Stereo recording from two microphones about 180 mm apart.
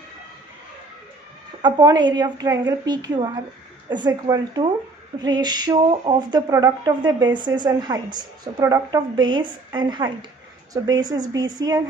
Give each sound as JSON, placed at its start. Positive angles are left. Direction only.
{"t": 1.6, "sound": "speech", "side_deg": -25}